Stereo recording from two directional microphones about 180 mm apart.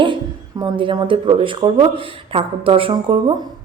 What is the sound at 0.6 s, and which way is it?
A woman's voice, 25° right (ahead or behind).